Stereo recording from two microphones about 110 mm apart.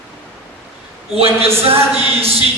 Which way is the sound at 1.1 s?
65° right (ahead or behind).